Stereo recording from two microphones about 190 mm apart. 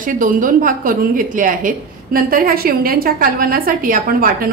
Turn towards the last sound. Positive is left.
turn(degrees=-50)  # may be behind; listen again after turning